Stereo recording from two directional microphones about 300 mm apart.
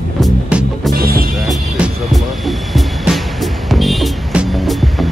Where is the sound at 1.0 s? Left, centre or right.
Right.